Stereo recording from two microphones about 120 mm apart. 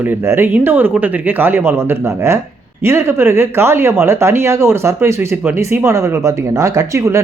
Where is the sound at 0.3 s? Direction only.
15° right (ahead or behind).